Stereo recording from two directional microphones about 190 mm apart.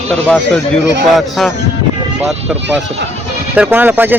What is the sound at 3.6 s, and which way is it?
Speech, 10° right (ahead or behind).